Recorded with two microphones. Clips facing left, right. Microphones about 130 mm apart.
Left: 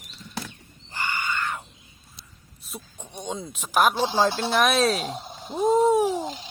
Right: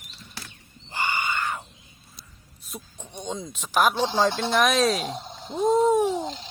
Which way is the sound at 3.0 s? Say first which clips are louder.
Even; 10° left (ahead or behind).